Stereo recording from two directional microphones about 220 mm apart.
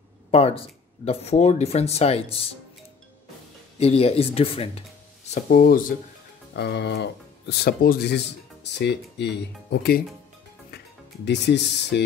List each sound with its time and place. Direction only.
0.3 s speech: 25° left (ahead or behind)
3.8 s speech: 25° left (ahead or behind)
5.3 s speech: 40° left (ahead or behind)
11.2 s speech: 50° left (ahead or behind)